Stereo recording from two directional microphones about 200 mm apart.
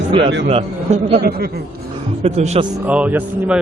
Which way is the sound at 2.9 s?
5° right (ahead or behind).